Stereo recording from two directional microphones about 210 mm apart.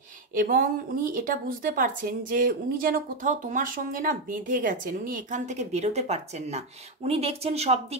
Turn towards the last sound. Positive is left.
turn(degrees=-30)  # may be behind; listen again after turning